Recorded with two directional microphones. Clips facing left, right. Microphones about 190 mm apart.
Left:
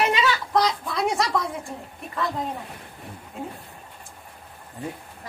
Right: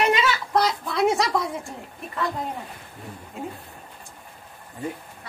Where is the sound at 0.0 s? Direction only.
Centre (ahead or behind).